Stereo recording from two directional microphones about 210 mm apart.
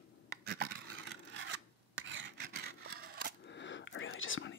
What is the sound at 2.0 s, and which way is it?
Scissors, 60° right (ahead or behind).